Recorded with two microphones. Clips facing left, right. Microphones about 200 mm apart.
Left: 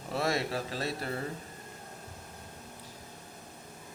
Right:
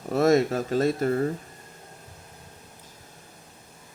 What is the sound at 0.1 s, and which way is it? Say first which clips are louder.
Speech: right 11 dB; 45° right (ahead or behind).